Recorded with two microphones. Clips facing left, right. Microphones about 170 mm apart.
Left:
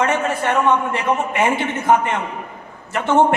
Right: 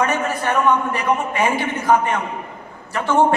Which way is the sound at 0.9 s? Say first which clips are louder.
Left 1 dB; 25° left (ahead or behind).